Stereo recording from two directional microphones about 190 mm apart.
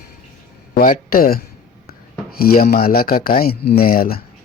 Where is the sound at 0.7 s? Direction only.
45° left (ahead or behind).